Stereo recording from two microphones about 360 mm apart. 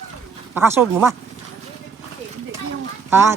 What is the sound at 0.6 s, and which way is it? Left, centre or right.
Speech, centre.